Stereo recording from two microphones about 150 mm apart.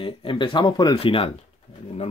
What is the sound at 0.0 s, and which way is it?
Speech, 35° left (ahead or behind).